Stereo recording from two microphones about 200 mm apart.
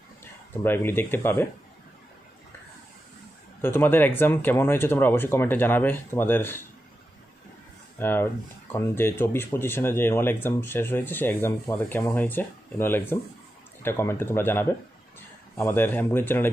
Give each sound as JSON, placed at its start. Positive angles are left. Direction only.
{"t": 0.5, "sound": "speech", "side_deg": 10}
{"t": 3.6, "sound": "speech", "side_deg": 10}
{"t": 7.9, "sound": "speech", "side_deg": 10}